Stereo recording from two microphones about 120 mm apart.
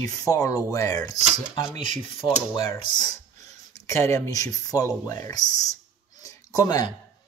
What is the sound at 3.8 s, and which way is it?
Speech, 25° left (ahead or behind).